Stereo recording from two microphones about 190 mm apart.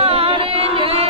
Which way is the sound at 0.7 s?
30° right (ahead or behind).